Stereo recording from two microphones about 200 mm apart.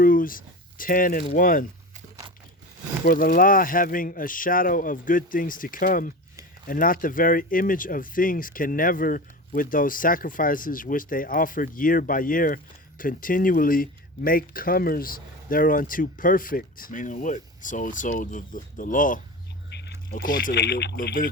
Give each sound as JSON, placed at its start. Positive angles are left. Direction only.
{"t": 0.0, "sound": "speech", "side_deg": 45}
{"t": 3.0, "sound": "speech", "side_deg": 45}
{"t": 19.7, "sound": "a sound", "side_deg": 55}
{"t": 20.4, "sound": "speech", "side_deg": 55}